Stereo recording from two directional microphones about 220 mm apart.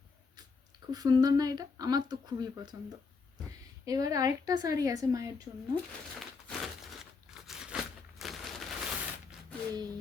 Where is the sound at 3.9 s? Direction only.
15° right (ahead or behind).